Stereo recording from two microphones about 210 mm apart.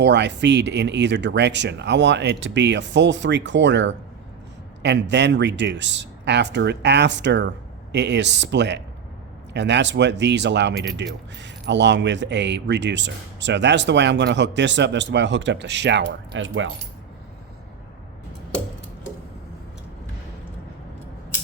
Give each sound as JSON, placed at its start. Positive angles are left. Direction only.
{"t": 0.0, "sound": "speech", "side_deg": -55}